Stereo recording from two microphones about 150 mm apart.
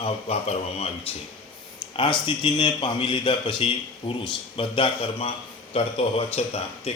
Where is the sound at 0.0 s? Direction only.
40° left (ahead or behind).